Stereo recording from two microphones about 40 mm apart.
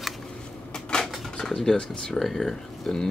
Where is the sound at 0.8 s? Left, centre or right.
Centre.